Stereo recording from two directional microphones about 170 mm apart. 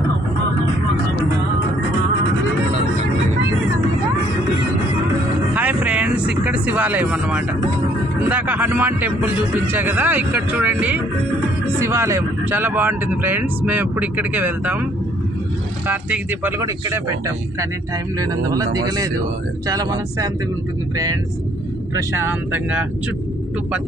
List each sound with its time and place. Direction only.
5.5 s vehicle: 10° right (ahead or behind)
8.3 s speech: 10° right (ahead or behind)
15.9 s speech: 10° right (ahead or behind)
18.2 s speech: 20° right (ahead or behind)
19.7 s speech: 20° right (ahead or behind)
21.9 s speech: 10° right (ahead or behind)